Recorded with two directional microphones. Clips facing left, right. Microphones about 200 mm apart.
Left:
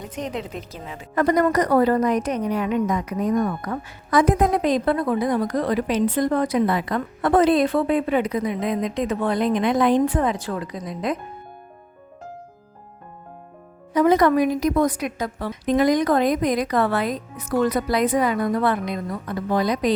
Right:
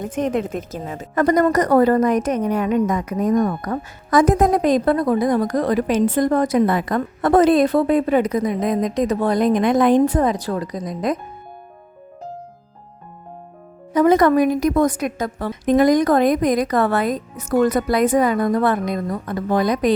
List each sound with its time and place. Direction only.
0.0 s a woman's voice: 50° right (ahead or behind)
13.9 s a woman's voice: 50° right (ahead or behind)